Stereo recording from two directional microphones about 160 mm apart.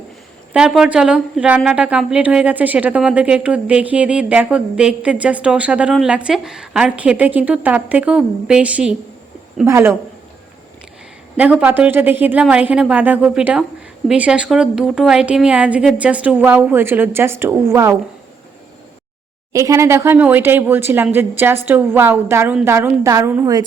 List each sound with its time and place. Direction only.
0.5 s a woman's voice: 5° right (ahead or behind)
11.6 s a woman's voice: 10° right (ahead or behind)
19.5 s a woman's voice: 20° right (ahead or behind)